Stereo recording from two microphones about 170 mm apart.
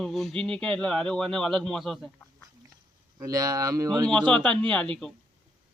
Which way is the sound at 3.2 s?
20° right (ahead or behind).